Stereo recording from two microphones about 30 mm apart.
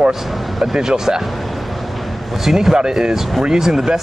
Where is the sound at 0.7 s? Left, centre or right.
Centre.